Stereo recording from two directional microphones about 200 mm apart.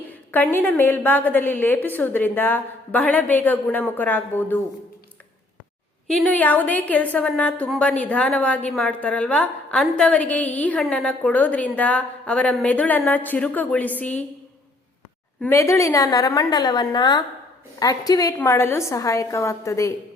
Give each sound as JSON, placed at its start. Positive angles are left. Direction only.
{"t": 0.1, "sound": "a woman's voice", "side_deg": 10}
{"t": 6.1, "sound": "a woman's voice", "side_deg": 5}
{"t": 15.4, "sound": "a woman's voice", "side_deg": 10}